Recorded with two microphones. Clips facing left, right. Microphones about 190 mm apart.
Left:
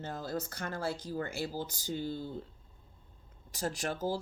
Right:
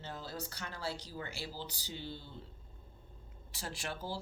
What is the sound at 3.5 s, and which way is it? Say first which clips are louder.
Speech: left 7 dB; 45° left (ahead or behind).